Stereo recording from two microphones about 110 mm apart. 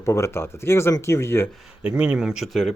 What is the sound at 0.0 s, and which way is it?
Speech, 25° left (ahead or behind).